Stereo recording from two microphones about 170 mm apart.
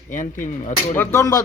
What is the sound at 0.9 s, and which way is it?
Speech, 20° left (ahead or behind).